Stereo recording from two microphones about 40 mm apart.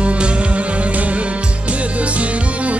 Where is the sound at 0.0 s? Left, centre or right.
Right.